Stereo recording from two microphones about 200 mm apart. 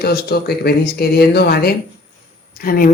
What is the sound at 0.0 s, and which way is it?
Speech, 50° left (ahead or behind).